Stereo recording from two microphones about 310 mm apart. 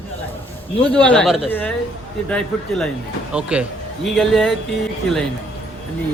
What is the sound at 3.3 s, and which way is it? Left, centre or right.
Speech, centre.